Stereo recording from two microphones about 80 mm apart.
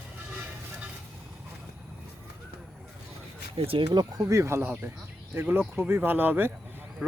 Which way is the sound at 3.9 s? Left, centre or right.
Right.